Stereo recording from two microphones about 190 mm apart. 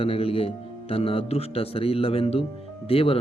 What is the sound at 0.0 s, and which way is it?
A man's voice, 30° left (ahead or behind).